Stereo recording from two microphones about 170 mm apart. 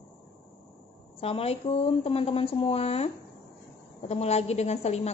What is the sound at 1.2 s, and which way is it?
A woman's voice, 35° left (ahead or behind).